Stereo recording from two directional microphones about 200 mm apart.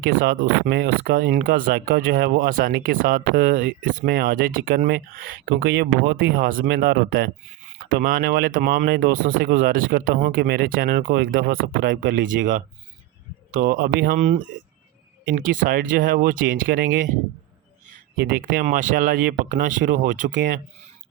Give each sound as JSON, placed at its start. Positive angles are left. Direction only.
{"t": 0.7, "sound": "speech", "side_deg": -50}
{"t": 13.7, "sound": "speech", "side_deg": -45}
{"t": 18.2, "sound": "speech", "side_deg": -45}